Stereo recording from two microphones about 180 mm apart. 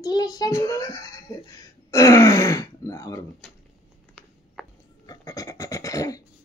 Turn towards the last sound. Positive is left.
turn(degrees=20)  # may be behind; listen again after turning